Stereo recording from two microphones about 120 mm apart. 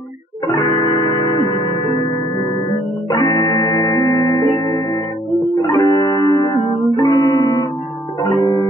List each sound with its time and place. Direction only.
0.6 s music: 30° left (ahead or behind)
3.1 s music: 30° left (ahead or behind)